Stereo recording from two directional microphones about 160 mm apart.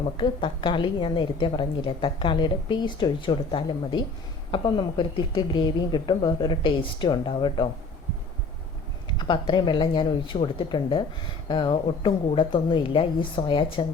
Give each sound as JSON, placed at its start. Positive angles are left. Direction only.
{"t": 0.2, "sound": "a woman's voice", "side_deg": 30}
{"t": 9.1, "sound": "a woman's voice", "side_deg": 30}